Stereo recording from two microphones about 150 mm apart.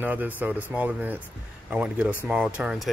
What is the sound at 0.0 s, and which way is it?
Speech, 10° right (ahead or behind).